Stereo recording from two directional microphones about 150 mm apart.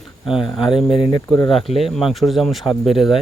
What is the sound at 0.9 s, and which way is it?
Speech, 35° left (ahead or behind).